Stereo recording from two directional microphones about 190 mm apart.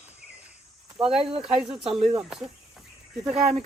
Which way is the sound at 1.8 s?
30° right (ahead or behind).